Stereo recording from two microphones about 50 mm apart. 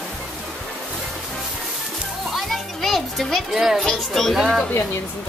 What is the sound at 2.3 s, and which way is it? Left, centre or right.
Children playing, centre.